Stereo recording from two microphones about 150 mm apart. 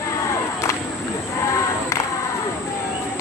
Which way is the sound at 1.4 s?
20° left (ahead or behind).